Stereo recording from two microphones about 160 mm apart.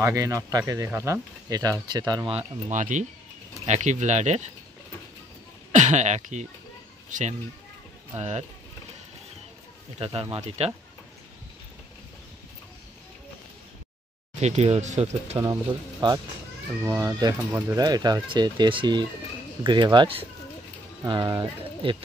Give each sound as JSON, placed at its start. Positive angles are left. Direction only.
{"t": 0.0, "sound": "speech", "side_deg": -20}
{"t": 2.3, "sound": "speech", "side_deg": -50}
{"t": 5.7, "sound": "speech", "side_deg": -50}
{"t": 8.2, "sound": "speech", "side_deg": -40}
{"t": 9.9, "sound": "speech", "side_deg": -35}
{"t": 14.3, "sound": "speech", "side_deg": -45}
{"t": 15.4, "sound": "speech", "side_deg": -25}
{"t": 17.5, "sound": "speech", "side_deg": -15}
{"t": 17.8, "sound": "speech", "side_deg": -25}